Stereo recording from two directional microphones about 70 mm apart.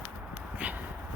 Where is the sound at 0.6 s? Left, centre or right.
Centre.